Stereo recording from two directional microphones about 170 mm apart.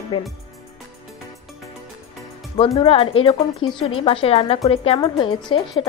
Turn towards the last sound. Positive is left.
turn(degrees=30)  # may be behind; listen again after turning